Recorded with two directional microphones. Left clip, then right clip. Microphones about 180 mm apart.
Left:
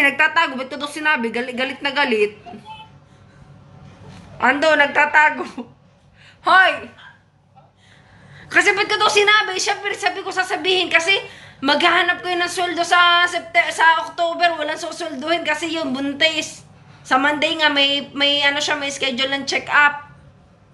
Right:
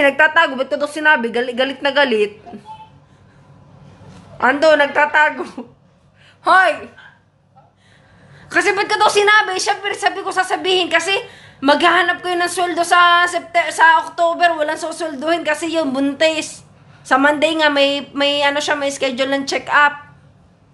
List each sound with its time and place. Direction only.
0.0 s a woman's voice: 40° right (ahead or behind)
4.4 s a woman's voice: 30° right (ahead or behind)
8.4 s a woman's voice: 30° right (ahead or behind)